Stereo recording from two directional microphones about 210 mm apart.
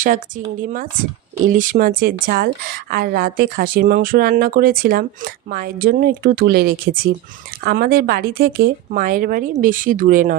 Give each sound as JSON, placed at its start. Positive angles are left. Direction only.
{"t": 0.0, "sound": "a woman's voice", "side_deg": -40}